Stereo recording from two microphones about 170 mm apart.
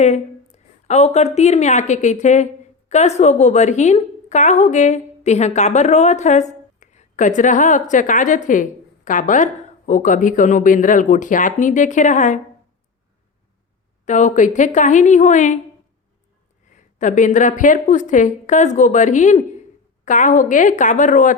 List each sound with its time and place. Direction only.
0.0 s a woman's voice: 40° left (ahead or behind)
14.0 s a woman's voice: 45° left (ahead or behind)
16.7 s a woman's voice: 45° left (ahead or behind)